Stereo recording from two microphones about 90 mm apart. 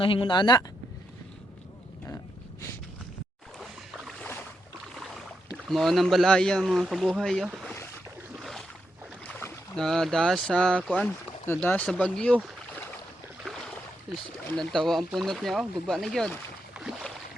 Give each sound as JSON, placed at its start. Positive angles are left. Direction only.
{"t": 0.0, "sound": "speech", "side_deg": 75}
{"t": 4.2, "sound": "boat", "side_deg": 20}
{"t": 5.6, "sound": "speech", "side_deg": 0}
{"t": 8.4, "sound": "boat", "side_deg": 0}
{"t": 9.7, "sound": "speech", "side_deg": 5}
{"t": 13.4, "sound": "boat", "side_deg": 5}
{"t": 14.1, "sound": "speech", "side_deg": 5}